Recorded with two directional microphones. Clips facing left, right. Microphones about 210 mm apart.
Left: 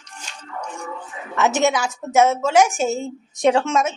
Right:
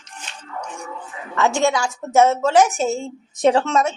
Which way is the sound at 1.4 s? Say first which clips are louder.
Even; 20° left (ahead or behind).